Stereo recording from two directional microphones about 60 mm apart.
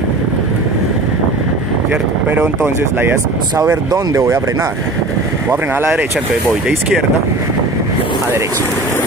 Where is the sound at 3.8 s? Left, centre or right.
Right.